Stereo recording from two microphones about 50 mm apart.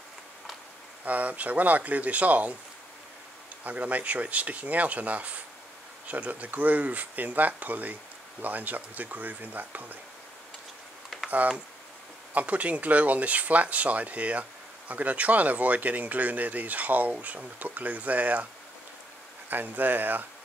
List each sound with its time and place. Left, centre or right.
1.0 s speech: right
3.6 s speech: right
11.2 s speech: right
19.5 s speech: right